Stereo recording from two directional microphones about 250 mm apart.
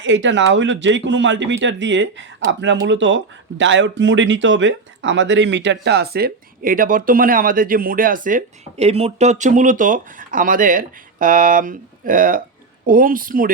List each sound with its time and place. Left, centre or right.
0.0 s speech: right